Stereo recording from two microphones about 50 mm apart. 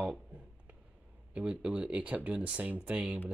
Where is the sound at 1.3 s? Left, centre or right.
Centre.